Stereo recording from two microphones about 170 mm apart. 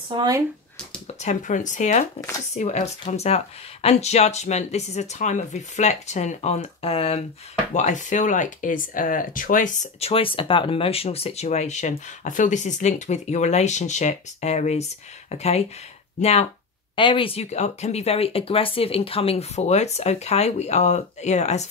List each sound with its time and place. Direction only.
0.1 s speech: 25° right (ahead or behind)
1.2 s speech: 45° left (ahead or behind)